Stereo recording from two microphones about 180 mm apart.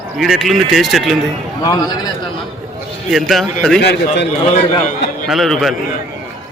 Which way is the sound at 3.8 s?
65° left (ahead or behind).